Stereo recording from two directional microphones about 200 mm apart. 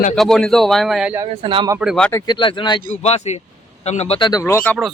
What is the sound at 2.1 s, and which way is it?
Speech, 20° left (ahead or behind).